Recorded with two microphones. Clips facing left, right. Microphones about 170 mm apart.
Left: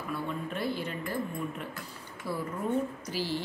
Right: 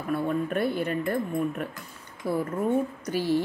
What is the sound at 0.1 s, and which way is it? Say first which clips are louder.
A woman's voice: right 9 dB; 55° right (ahead or behind).